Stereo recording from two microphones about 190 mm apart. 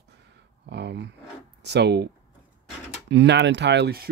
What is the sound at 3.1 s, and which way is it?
Speech, 65° right (ahead or behind).